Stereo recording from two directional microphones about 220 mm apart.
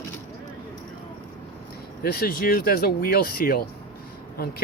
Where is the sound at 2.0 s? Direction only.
45° left (ahead or behind).